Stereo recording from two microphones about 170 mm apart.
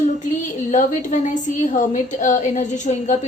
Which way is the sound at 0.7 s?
45° left (ahead or behind).